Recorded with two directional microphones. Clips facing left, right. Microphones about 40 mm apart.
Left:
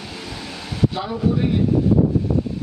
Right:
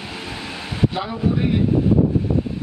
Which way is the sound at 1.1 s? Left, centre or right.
Right.